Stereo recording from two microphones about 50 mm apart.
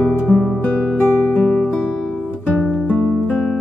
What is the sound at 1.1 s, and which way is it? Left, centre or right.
Music, left.